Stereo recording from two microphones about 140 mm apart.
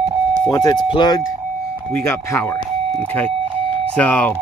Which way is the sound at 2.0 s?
20° left (ahead or behind).